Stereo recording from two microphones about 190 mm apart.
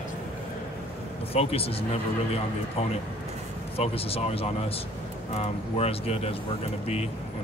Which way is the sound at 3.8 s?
30° left (ahead or behind).